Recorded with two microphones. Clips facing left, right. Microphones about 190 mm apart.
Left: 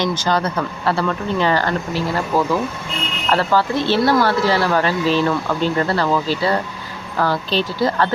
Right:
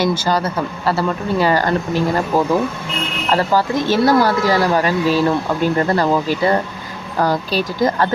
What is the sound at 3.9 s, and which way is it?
Speech, 40° right (ahead or behind).